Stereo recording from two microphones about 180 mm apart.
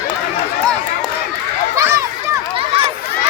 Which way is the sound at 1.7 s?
15° right (ahead or behind).